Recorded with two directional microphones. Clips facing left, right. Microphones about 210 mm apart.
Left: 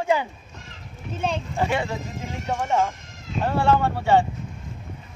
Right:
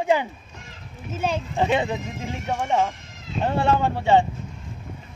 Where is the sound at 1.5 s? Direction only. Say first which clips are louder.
Right 5 dB; 20° right (ahead or behind).